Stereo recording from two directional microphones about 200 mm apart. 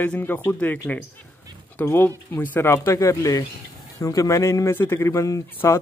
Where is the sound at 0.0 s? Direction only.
10° left (ahead or behind).